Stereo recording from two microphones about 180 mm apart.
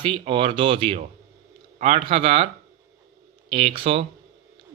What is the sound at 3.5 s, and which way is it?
Speech, 30° right (ahead or behind).